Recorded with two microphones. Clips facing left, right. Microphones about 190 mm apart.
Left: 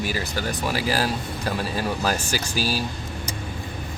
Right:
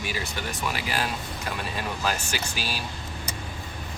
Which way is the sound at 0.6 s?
35° left (ahead or behind).